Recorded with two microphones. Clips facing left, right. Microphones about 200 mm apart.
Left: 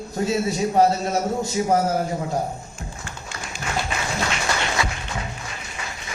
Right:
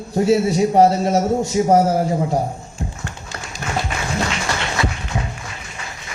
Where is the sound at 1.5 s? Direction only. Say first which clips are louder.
Right 6 dB; 25° right (ahead or behind).